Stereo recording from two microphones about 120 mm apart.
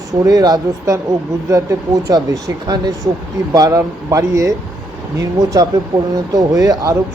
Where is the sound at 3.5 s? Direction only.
30° right (ahead or behind).